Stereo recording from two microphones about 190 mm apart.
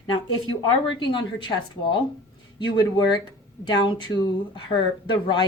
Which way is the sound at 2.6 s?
25° left (ahead or behind).